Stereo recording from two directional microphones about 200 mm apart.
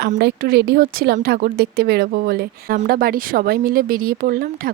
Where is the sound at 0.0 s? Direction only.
50° right (ahead or behind).